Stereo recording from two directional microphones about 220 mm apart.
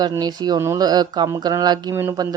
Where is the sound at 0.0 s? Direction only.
20° right (ahead or behind).